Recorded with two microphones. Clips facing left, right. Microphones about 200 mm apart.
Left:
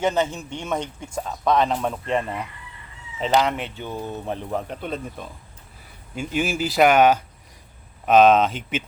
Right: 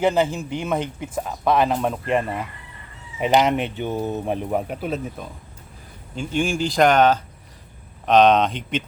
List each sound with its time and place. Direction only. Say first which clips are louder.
0.3 s speech: right 3 dB; 5° right (ahead or behind)
3.2 s speech: right 3 dB; 15° right (ahead or behind); by 8.8 s 5° left (ahead or behind)